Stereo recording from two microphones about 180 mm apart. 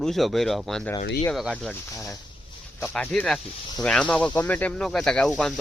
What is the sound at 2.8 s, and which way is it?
Speech, 5° left (ahead or behind).